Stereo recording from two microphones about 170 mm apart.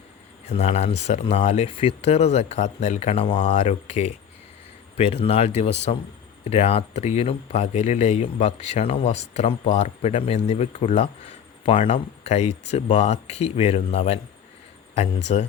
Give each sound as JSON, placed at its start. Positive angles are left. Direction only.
{"t": 0.4, "sound": "speech", "side_deg": 40}